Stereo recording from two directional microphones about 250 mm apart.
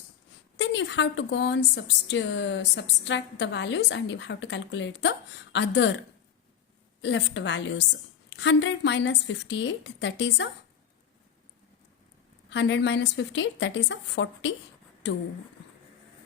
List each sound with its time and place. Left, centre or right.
0.5 s a woman's voice: left
7.0 s a woman's voice: left
12.5 s a woman's voice: left